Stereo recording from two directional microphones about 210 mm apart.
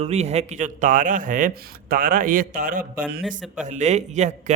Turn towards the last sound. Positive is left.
turn(degrees=-35)  # may be behind; listen again after turning